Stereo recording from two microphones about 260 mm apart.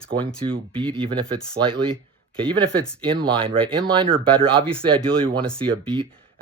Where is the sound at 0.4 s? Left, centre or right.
Centre.